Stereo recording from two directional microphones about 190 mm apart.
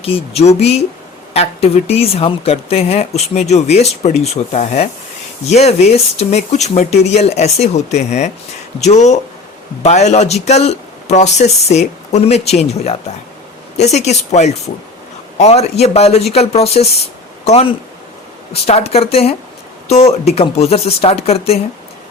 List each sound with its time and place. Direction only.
0.0 s speech: 30° left (ahead or behind)